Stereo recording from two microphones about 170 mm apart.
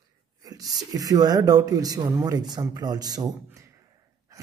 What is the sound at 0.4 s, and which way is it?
Whispering, 20° right (ahead or behind).